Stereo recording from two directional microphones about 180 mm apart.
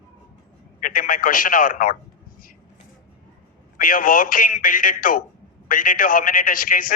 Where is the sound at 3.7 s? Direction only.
50° left (ahead or behind).